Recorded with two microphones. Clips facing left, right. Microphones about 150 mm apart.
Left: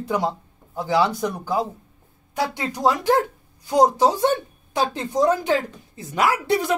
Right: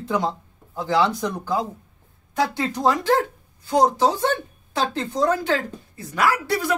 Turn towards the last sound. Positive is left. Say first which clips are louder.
# left 1 dB
turn(degrees=20)  # may be behind; listen again after turning